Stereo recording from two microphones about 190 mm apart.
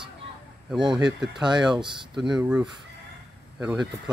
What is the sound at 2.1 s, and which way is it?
Speech, centre (ahead or behind).